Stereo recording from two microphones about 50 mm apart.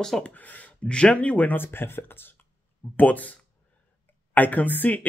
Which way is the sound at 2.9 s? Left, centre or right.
Left.